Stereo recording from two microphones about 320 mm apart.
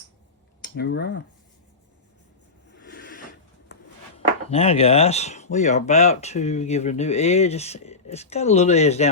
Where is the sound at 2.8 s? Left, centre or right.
Left.